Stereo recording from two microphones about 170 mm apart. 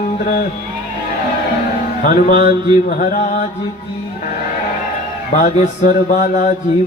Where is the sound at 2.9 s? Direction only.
55° left (ahead or behind).